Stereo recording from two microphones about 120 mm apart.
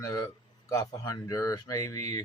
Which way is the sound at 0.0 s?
30° left (ahead or behind).